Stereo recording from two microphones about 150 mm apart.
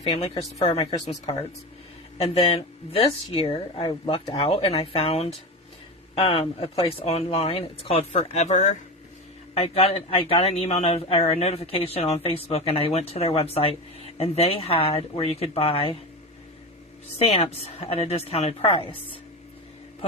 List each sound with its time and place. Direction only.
0.0 s a man's voice: 40° left (ahead or behind)
2.1 s a man's voice: 40° left (ahead or behind)
9.6 s a man's voice: 40° left (ahead or behind)
17.2 s a man's voice: 40° left (ahead or behind)